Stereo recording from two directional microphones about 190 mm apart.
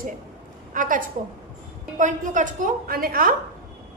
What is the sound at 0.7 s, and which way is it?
A woman's voice, 45° right (ahead or behind).